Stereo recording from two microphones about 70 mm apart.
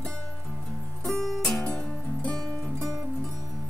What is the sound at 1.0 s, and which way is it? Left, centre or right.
Music, centre.